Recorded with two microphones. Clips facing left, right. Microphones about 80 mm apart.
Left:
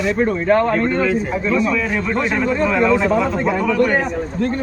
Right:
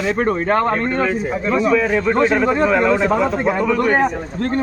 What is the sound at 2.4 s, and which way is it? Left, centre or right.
Speech, right.